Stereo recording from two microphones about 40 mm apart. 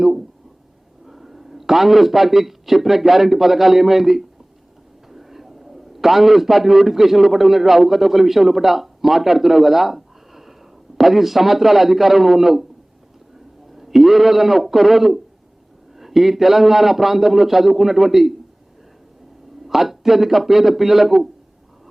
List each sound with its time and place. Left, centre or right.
1.0 s a man's voice: centre
13.7 s a man's voice: centre
19.6 s a man's voice: centre